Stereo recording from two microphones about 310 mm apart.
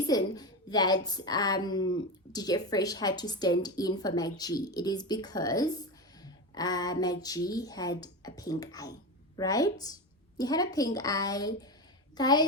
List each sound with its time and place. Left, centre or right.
0.1 s a woman's voice: centre